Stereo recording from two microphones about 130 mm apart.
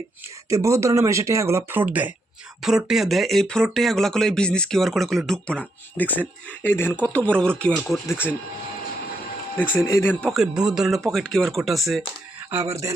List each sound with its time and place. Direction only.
0.5 s speech: 25° right (ahead or behind); by 7.7 s 5° left (ahead or behind)
7.9 s speech: 25° left (ahead or behind)
9.6 s speech: 15° left (ahead or behind)
10.3 s speech: 5° right (ahead or behind)
12.5 s speech: 20° right (ahead or behind)